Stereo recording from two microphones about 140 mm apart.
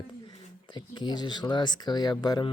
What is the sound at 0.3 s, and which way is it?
Speech, 30° left (ahead or behind).